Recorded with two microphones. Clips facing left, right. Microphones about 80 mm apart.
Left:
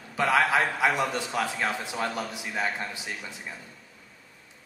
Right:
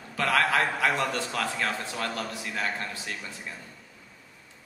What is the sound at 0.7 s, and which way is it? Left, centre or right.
A man's voice, centre.